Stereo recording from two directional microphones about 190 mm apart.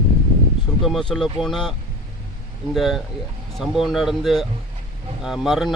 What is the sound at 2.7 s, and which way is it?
Speech, centre (ahead or behind).